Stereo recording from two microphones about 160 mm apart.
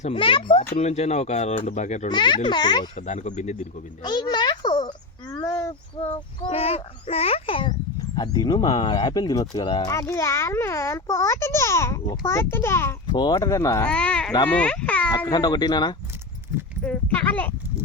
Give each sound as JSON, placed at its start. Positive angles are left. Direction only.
{"t": 0.0, "sound": "a child's voice", "side_deg": 35}
{"t": 0.7, "sound": "speech", "side_deg": 45}
{"t": 2.0, "sound": "speech", "side_deg": 30}
{"t": 2.9, "sound": "speech", "side_deg": 45}
{"t": 4.0, "sound": "a sound", "side_deg": 25}
{"t": 6.0, "sound": "a child's voice", "side_deg": 35}
{"t": 9.9, "sound": "a child's voice", "side_deg": 20}
{"t": 13.1, "sound": "speech", "side_deg": 25}
{"t": 13.8, "sound": "a child's voice", "side_deg": 5}
{"t": 15.3, "sound": "speech", "side_deg": 25}
{"t": 16.8, "sound": "a child's voice", "side_deg": 10}